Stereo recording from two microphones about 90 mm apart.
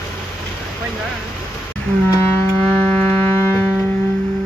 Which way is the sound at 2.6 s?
20° left (ahead or behind).